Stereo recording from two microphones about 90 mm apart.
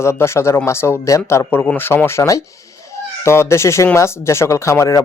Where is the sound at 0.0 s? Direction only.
30° left (ahead or behind).